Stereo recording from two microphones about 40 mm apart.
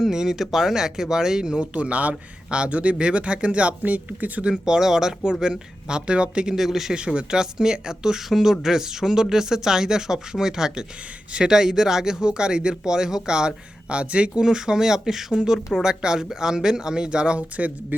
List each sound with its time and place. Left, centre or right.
0.0 s speech: centre
1.7 s speech: right
4.4 s speech: centre
6.5 s speech: centre
6.9 s speech: right
14.4 s speech: centre